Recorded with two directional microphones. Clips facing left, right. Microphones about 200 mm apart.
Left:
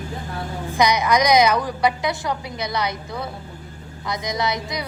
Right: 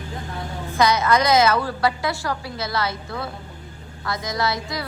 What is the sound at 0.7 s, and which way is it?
A woman's voice, 15° left (ahead or behind).